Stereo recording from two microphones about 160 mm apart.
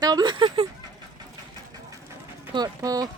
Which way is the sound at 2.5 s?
25° right (ahead or behind).